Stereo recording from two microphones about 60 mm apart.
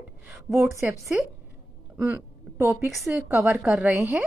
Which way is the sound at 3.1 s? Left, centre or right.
Right.